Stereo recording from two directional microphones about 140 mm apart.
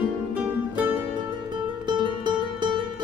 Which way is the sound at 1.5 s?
35° right (ahead or behind).